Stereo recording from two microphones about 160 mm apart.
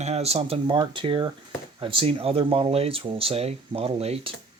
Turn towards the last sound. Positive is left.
turn(degrees=-40)  # may be behind; listen again after turning